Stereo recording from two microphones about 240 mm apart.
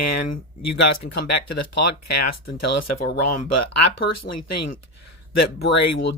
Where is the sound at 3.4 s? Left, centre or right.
Left.